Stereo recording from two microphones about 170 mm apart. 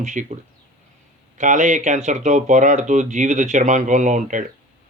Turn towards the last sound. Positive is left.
turn(degrees=-50)  # may be behind; listen again after turning